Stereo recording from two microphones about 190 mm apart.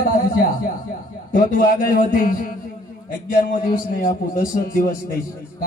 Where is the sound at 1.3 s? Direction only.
45° left (ahead or behind).